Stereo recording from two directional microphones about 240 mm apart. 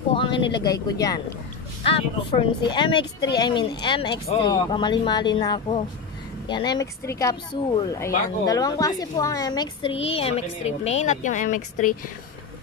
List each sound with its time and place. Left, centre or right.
0.1 s speech: left